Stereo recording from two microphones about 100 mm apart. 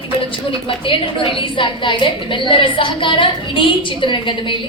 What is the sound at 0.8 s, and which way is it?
A woman's voice, 60° left (ahead or behind).